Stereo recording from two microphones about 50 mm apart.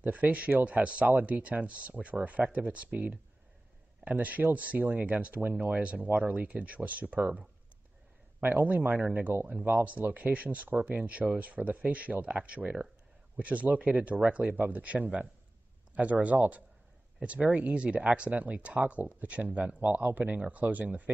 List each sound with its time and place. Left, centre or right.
0.0 s speech: right
20.2 s speech: right